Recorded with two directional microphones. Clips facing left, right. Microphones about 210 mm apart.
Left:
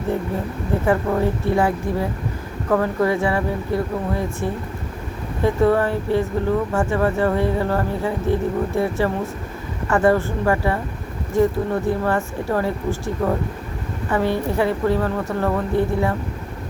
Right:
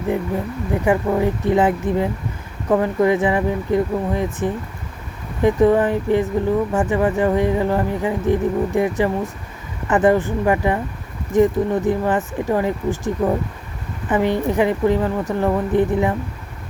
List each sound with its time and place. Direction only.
0.9 s speech: 15° right (ahead or behind)